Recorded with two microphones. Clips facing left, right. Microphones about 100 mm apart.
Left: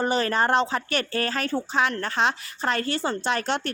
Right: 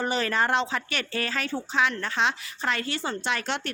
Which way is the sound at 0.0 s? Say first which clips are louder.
Left 3 dB; 40° left (ahead or behind).